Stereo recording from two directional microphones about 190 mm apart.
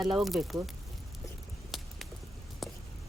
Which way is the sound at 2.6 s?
Centre (ahead or behind).